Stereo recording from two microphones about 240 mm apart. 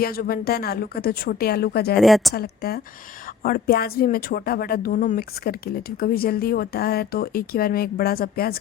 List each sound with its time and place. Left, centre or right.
0.0 s speech: left
2.0 s a woman's voice: centre
2.3 s speech: left